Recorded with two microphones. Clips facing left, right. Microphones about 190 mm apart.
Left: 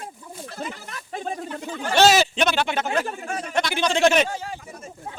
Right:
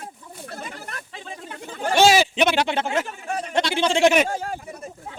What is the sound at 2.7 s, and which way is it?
Speech, 25° right (ahead or behind).